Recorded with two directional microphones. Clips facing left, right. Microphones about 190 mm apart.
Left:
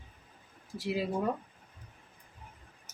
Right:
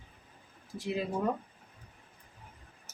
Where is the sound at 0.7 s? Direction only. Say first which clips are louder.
Left 1 dB; 5° left (ahead or behind).